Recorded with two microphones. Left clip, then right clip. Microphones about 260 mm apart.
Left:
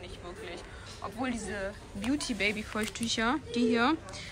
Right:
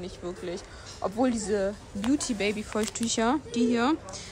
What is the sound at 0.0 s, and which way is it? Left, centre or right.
Speech, right.